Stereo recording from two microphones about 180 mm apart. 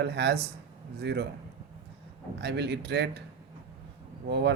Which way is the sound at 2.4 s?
70° right (ahead or behind).